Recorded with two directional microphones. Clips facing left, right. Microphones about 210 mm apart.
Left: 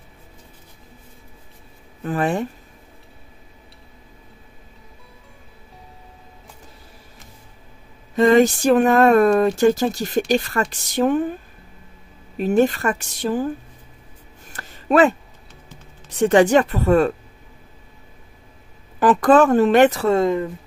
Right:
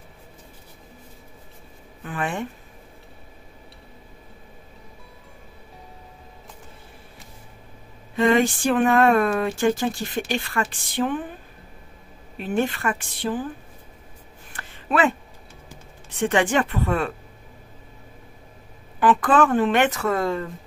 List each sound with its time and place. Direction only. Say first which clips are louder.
2.0 s speech: left 7 dB; 40° left (ahead or behind)
8.2 s speech: left 5 dB; 40° left (ahead or behind)
12.4 s a woman's voice: left 7 dB; 40° left (ahead or behind)
14.5 s a sound: left 7 dB; 40° left (ahead or behind)
16.1 s speech: left 7 dB; 40° left (ahead or behind)
18.9 s speech: left 5 dB; 40° left (ahead or behind); by 20.4 s 20° left (ahead or behind)